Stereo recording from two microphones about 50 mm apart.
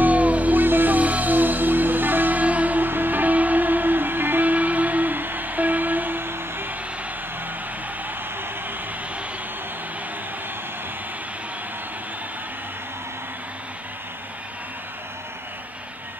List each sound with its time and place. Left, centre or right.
0.0 s music: right